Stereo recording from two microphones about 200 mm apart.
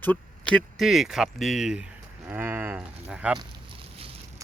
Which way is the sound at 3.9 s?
30° right (ahead or behind).